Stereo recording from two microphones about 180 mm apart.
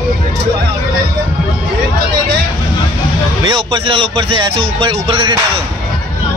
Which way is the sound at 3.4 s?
30° right (ahead or behind).